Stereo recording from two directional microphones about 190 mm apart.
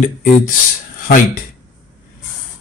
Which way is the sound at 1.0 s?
50° left (ahead or behind).